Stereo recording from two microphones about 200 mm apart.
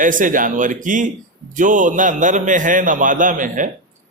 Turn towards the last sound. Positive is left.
turn(degrees=-40)  # may be behind; listen again after turning